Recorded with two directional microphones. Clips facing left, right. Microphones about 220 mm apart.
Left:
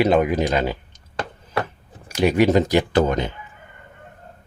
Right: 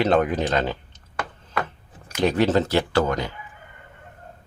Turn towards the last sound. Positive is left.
turn(degrees=20)  # may be behind; listen again after turning